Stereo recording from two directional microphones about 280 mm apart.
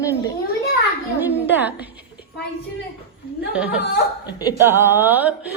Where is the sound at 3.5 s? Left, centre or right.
Centre.